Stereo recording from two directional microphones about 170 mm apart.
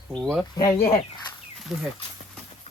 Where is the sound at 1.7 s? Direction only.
Centre (ahead or behind).